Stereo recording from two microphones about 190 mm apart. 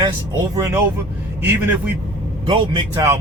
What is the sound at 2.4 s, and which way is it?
Speech, 25° right (ahead or behind).